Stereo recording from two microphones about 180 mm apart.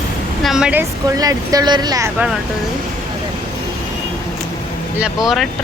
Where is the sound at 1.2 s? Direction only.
20° right (ahead or behind).